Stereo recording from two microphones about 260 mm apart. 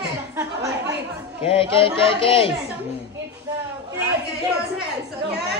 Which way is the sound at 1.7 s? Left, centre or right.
Left.